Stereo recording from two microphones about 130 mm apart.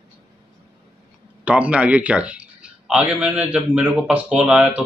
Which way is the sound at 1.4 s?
10° right (ahead or behind).